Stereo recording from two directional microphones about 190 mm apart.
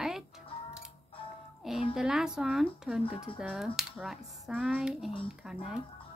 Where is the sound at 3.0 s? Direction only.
30° left (ahead or behind).